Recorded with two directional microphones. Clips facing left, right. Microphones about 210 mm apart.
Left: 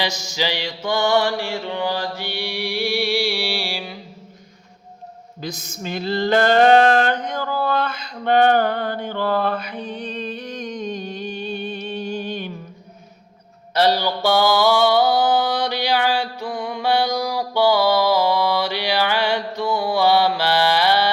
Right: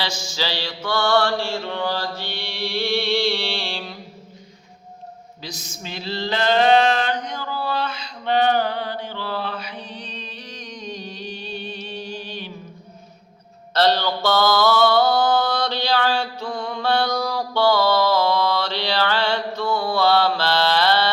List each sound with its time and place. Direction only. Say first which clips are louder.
0.3 s mantra: left 2 dB; 15° left (ahead or behind)
5.4 s male singing: left 6 dB; 55° left (ahead or behind)
13.7 s mantra: left 1 dB; 15° left (ahead or behind)